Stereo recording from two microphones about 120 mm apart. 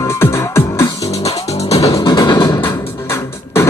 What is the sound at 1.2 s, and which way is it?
Music, 60° left (ahead or behind).